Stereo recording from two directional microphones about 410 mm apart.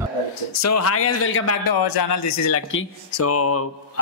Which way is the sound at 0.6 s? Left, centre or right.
Left.